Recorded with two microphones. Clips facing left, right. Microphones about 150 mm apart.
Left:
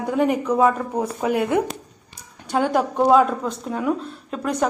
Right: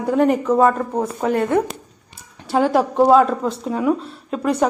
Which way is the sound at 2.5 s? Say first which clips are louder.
Right 3 dB; 5° right (ahead or behind).